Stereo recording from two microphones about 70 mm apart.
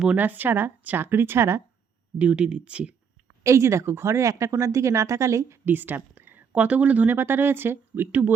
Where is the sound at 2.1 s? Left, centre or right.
Centre.